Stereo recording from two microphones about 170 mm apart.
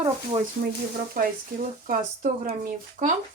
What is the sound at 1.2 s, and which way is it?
Speech, 55° right (ahead or behind).